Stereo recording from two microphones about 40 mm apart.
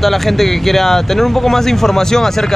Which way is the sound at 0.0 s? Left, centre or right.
Centre.